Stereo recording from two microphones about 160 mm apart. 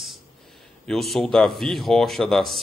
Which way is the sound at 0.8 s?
Centre (ahead or behind).